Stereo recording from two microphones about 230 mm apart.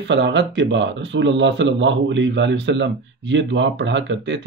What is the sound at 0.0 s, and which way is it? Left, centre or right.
Speech, right.